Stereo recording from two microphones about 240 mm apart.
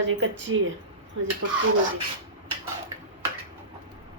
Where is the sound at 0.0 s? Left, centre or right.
Right.